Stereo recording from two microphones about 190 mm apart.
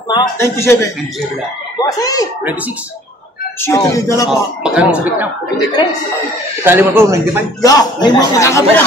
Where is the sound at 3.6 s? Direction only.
15° left (ahead or behind).